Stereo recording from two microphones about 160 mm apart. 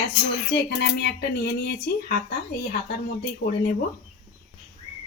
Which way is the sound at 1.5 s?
80° left.